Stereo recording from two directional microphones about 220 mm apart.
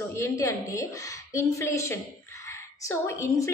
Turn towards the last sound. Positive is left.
turn(degrees=15)  # may be behind; listen again after turning